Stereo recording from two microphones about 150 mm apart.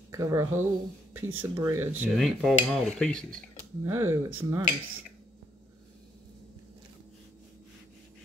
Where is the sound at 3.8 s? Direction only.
15° right (ahead or behind).